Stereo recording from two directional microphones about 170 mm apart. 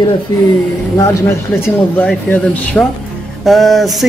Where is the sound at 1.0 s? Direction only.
15° left (ahead or behind).